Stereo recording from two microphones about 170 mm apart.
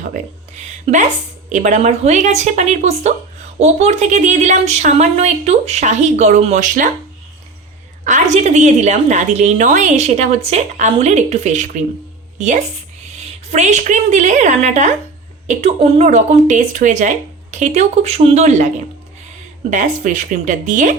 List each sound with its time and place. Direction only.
0.0 s a woman's voice: 45° right (ahead or behind)
8.0 s a woman's voice: 45° right (ahead or behind)
19.7 s a woman's voice: 50° right (ahead or behind)